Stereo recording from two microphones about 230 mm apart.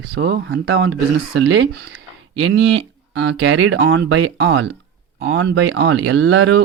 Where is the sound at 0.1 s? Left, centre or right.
Right.